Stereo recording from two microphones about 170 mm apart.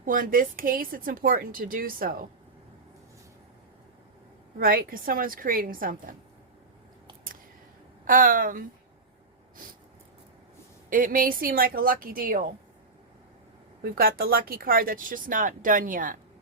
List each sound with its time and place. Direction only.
0.0 s speech: 55° right (ahead or behind)
4.5 s speech: 60° right (ahead or behind)
8.0 s a woman's voice: 55° right (ahead or behind)
10.8 s speech: 55° right (ahead or behind)
13.8 s speech: 60° right (ahead or behind)